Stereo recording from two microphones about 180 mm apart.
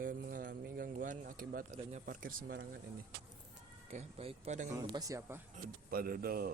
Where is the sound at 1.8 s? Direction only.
40° right (ahead or behind).